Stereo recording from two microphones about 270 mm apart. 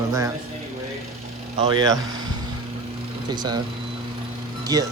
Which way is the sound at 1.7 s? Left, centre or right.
Centre.